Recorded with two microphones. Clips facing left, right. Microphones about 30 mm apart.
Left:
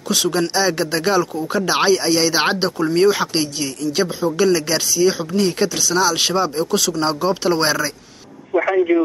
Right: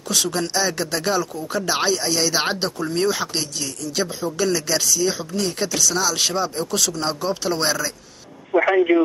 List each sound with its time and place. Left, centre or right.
0.1 s speech: centre
8.5 s a man's voice: centre